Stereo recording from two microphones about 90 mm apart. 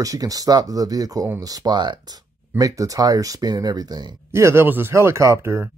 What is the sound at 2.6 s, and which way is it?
Speech, 40° right (ahead or behind).